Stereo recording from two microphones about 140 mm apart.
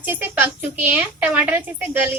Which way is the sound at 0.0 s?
15° right (ahead or behind).